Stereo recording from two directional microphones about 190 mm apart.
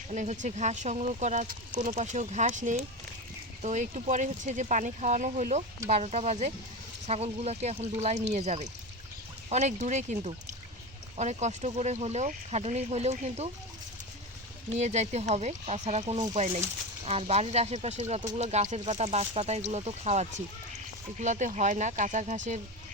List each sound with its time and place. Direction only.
0.1 s speech: 40° right (ahead or behind)
14.8 s speech: 35° right (ahead or behind)